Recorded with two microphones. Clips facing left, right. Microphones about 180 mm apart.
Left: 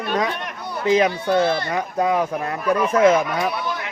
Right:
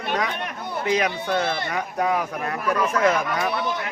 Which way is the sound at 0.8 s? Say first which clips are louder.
Left 6 dB; 25° left (ahead or behind).